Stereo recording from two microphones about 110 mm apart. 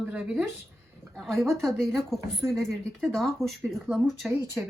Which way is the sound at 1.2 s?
Centre (ahead or behind).